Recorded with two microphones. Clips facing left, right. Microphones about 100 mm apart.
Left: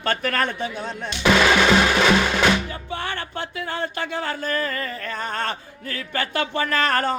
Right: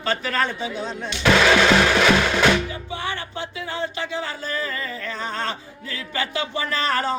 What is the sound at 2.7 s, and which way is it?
Music, 50° left (ahead or behind).